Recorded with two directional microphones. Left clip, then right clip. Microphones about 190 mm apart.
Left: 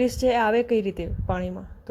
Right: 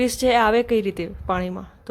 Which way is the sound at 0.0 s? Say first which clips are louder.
Right 3 dB; 10° right (ahead or behind).